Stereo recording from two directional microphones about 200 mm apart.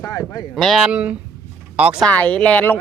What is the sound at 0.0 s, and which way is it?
Speech, 15° left (ahead or behind).